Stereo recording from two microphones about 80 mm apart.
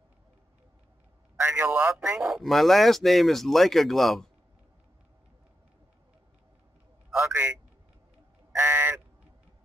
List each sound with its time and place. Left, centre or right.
1.4 s a man's voice: right
2.0 s a man's voice: centre
2.2 s speech: centre
7.2 s a sound: right
8.5 s crow: right